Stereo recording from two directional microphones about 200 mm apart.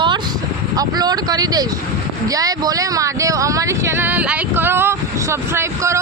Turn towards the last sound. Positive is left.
turn(degrees=-15)  # may be behind; listen again after turning